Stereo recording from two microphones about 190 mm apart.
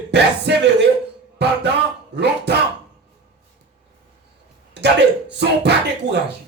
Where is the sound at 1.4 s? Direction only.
65° right (ahead or behind).